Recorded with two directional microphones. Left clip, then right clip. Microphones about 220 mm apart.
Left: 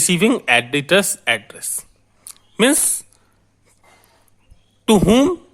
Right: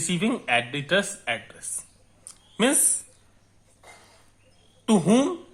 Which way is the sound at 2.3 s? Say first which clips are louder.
Left 7 dB; 40° left (ahead or behind).